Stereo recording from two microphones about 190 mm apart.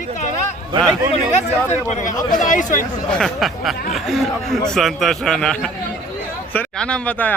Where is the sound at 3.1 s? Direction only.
5° left (ahead or behind).